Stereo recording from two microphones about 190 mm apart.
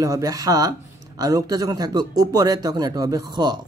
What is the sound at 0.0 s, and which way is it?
Speech, 20° right (ahead or behind).